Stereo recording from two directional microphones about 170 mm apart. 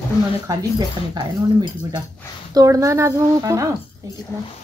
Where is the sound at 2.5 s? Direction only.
20° right (ahead or behind).